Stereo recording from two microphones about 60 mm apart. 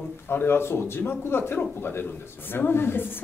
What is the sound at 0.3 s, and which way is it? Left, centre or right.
A woman's voice, left.